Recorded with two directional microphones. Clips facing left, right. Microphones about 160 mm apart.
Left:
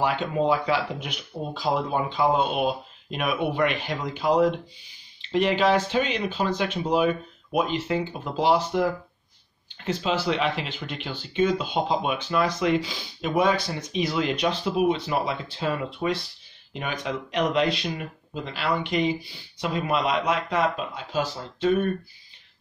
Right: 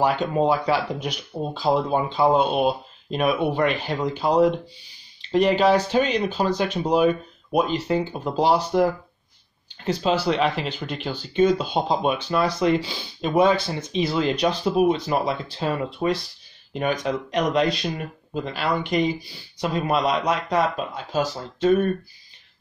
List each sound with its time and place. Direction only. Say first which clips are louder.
0.0 s speech: right 3 dB; 40° right (ahead or behind)
9.8 s speech: right 4 dB; 35° right (ahead or behind)